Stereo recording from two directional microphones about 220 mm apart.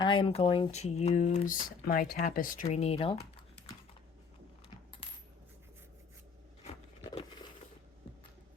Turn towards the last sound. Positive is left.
turn(degrees=25)  # may be behind; listen again after turning